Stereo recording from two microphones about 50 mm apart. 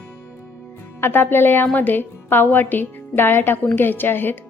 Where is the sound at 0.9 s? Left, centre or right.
Left.